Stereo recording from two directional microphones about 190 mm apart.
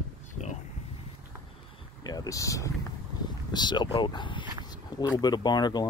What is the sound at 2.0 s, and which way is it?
Speech, 20° left (ahead or behind).